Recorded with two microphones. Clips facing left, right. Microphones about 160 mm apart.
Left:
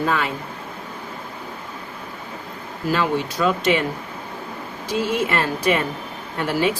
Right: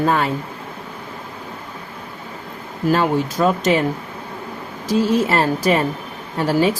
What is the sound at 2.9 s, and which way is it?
Speech, 45° right (ahead or behind).